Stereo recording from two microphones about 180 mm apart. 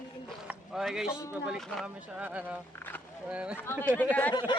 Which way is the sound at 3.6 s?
15° left (ahead or behind).